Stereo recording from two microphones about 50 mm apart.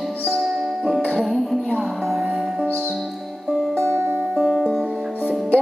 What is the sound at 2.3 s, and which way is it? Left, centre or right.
Music, centre.